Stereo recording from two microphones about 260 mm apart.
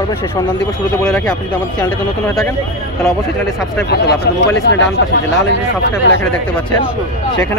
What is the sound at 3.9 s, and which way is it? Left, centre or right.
Speech, left.